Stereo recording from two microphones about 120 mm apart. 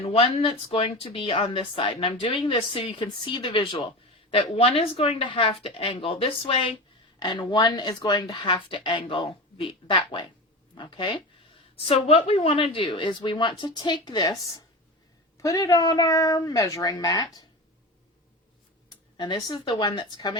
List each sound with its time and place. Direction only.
0.0 s speech: 50° left (ahead or behind)
7.2 s speech: 40° left (ahead or behind)
11.9 s a woman's voice: 55° left (ahead or behind); by 17.4 s 30° left (ahead or behind)
18.9 s speech: 40° left (ahead or behind)